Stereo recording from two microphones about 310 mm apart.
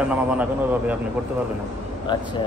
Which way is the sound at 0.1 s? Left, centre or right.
Centre.